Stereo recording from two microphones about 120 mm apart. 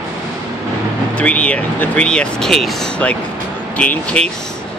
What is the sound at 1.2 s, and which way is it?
Speech, 10° left (ahead or behind).